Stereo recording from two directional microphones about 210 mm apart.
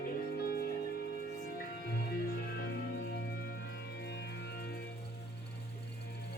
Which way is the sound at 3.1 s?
50° left (ahead or behind).